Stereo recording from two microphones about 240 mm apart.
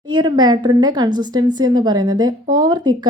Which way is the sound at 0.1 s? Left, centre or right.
Centre.